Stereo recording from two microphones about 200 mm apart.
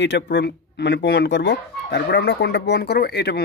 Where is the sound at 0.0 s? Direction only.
60° left (ahead or behind).